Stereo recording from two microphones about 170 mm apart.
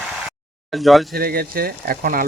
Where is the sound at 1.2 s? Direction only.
60° right (ahead or behind).